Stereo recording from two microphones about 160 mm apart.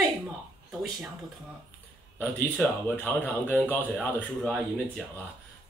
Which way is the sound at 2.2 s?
10° left (ahead or behind).